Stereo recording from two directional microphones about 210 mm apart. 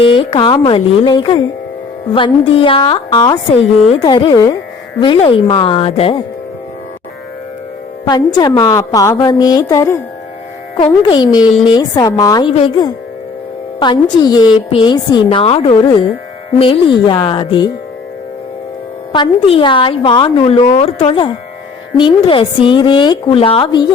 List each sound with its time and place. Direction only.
0.0 s a woman's voice: 25° left (ahead or behind)
8.4 s speech: 20° left (ahead or behind)
11.0 s a woman's voice: 20° left (ahead or behind)
19.1 s a woman's voice: 25° left (ahead or behind)